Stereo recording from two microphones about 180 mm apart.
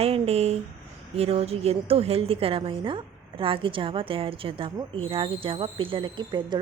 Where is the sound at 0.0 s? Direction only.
35° right (ahead or behind).